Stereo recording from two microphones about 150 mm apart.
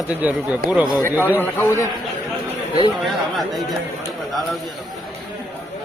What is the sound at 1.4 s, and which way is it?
Speech, 15° left (ahead or behind).